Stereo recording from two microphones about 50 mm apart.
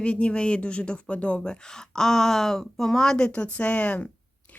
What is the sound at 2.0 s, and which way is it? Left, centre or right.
Speech, centre.